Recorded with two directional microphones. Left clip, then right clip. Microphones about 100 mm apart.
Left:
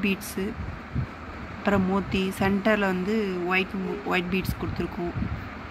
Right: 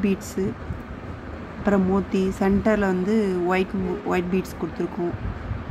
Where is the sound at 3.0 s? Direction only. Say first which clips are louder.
Right 4 dB; 35° right (ahead or behind).